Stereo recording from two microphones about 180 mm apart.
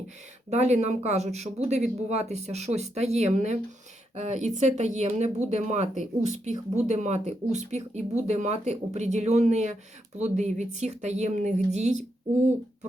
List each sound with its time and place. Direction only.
0.5 s speech: 40° right (ahead or behind)